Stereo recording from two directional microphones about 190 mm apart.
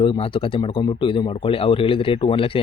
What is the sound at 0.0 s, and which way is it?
Speech, 30° left (ahead or behind).